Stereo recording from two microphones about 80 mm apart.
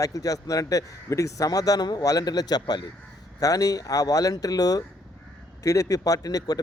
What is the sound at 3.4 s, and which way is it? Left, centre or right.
Speech, left.